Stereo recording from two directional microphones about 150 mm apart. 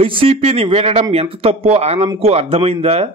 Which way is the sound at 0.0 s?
35° right (ahead or behind).